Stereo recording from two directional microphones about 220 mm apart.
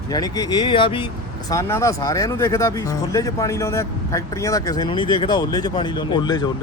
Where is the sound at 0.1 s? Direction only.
15° left (ahead or behind).